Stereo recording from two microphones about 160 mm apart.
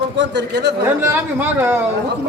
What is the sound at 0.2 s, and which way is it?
Speech, 90° right.